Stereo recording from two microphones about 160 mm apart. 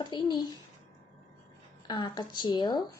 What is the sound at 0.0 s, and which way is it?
Speech, 30° left (ahead or behind).